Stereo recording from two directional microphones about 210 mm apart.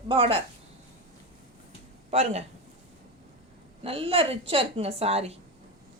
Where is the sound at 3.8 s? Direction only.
25° right (ahead or behind).